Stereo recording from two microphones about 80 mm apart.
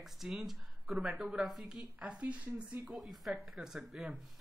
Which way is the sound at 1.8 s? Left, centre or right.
Centre.